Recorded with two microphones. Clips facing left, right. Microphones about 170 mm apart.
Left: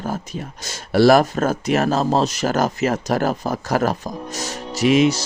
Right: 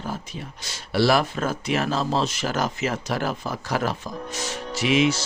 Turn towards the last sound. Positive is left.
turn(degrees=40)  # may be behind; listen again after turning